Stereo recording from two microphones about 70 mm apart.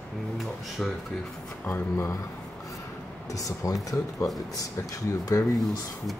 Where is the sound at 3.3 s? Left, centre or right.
Left.